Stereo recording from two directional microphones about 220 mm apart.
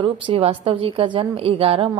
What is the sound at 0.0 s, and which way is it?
A woman's voice, 25° right (ahead or behind).